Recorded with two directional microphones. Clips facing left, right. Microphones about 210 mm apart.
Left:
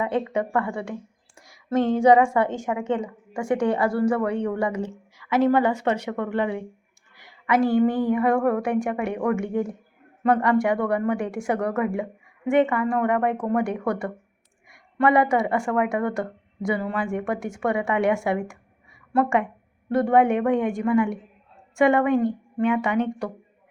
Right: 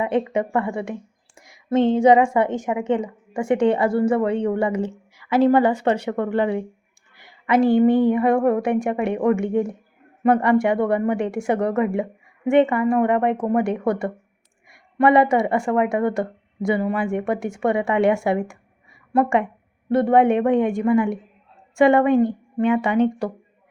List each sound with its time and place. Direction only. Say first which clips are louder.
0.0 s a woman's voice: right 3 dB; 20° right (ahead or behind)
19.9 s a woman's voice: right 3 dB; 25° right (ahead or behind)